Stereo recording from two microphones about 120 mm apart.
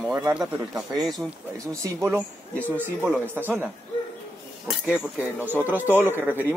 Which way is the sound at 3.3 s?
15° right (ahead or behind).